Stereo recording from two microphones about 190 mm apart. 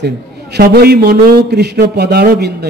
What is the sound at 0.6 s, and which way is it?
A man's voice, 55° right (ahead or behind).